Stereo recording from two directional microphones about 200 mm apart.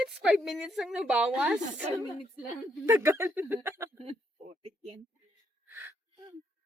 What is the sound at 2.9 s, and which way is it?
Speech, 10° right (ahead or behind).